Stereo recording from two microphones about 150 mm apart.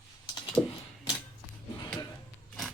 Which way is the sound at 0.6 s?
5° left (ahead or behind).